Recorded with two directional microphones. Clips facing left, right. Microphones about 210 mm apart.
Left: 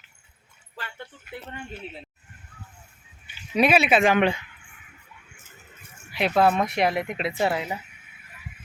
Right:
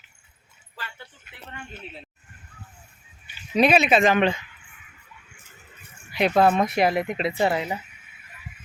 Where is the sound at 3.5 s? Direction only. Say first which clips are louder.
Right 1 dB; 5° left (ahead or behind).